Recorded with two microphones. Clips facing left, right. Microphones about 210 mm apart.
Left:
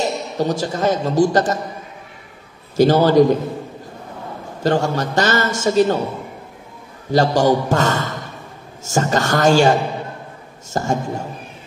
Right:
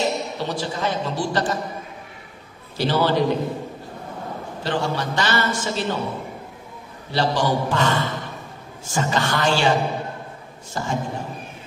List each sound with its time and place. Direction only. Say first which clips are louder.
0.0 s a man's voice: left 3 dB; 45° left (ahead or behind)
2.8 s a man's voice: left 8 dB; 45° left (ahead or behind)
4.6 s a man's voice: left 6 dB; 45° left (ahead or behind)
7.1 s a man's voice: left 7 dB; 45° left (ahead or behind)